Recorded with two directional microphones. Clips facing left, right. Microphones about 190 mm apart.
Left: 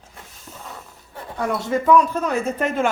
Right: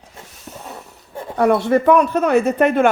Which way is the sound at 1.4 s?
65° right (ahead or behind).